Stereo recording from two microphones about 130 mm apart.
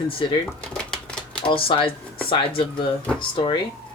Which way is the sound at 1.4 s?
40° left (ahead or behind).